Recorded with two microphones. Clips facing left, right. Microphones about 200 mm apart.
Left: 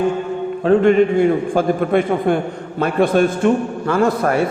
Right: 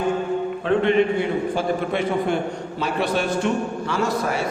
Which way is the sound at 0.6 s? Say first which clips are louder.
Left 7 dB; 40° left (ahead or behind).